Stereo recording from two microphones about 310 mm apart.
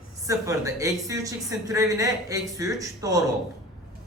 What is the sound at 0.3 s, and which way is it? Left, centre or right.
Speech, centre.